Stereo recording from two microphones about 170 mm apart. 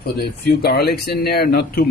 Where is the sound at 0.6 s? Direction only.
65° left (ahead or behind).